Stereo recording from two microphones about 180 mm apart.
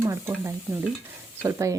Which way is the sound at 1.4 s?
15° right (ahead or behind).